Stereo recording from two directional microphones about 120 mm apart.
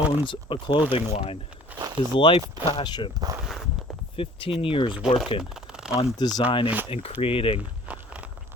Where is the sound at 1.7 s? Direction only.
15° right (ahead or behind).